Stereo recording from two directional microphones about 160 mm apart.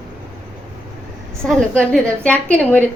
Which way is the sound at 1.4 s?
5° left (ahead or behind).